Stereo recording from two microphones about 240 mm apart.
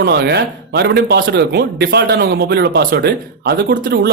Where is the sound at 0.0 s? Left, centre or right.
Right.